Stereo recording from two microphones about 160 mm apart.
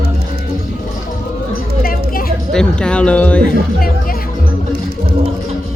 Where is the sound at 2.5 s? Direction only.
5° left (ahead or behind).